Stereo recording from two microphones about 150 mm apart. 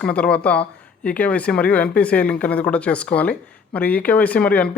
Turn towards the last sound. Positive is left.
turn(degrees=10)  # may be behind; listen again after turning